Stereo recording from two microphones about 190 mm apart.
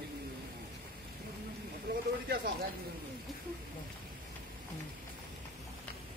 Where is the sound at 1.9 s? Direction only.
55° right (ahead or behind).